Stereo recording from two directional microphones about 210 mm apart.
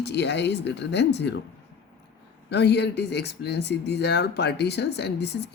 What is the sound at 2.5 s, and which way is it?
Speech, 50° left (ahead or behind).